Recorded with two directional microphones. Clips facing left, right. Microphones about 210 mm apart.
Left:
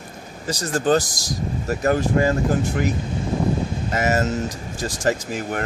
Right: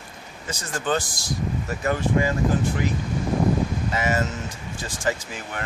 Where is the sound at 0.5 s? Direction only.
40° left (ahead or behind).